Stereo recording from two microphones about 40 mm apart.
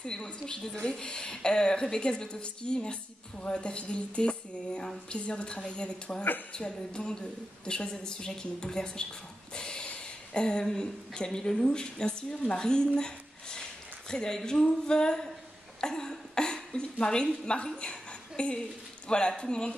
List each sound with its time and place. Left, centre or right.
0.0 s a woman's voice: left
9.5 s a sound: left
9.8 s a woman's voice: left
15.8 s cough: centre
17.7 s a sound: left
19.0 s a woman's voice: left